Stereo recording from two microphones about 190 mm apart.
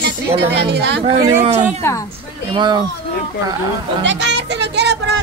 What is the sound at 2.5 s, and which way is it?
Speech, 25° right (ahead or behind).